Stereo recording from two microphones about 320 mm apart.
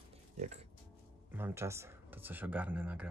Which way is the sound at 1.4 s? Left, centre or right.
Centre.